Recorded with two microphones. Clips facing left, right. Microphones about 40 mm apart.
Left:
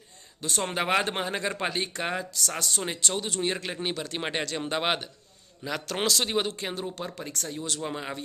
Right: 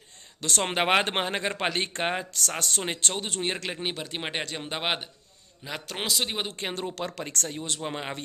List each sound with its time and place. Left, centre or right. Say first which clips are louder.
0.6 s speech: right 2 dB; right
3.8 s speech: left 1 dB; centre
6.5 s speech: even; right
6.7 s speech: right 2 dB; right